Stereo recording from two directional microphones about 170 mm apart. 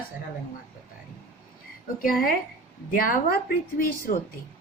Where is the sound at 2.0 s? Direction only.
55° left (ahead or behind).